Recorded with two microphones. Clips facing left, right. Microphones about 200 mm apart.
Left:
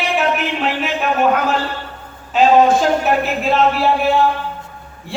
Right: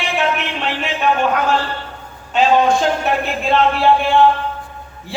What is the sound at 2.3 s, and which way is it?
Speech, centre (ahead or behind).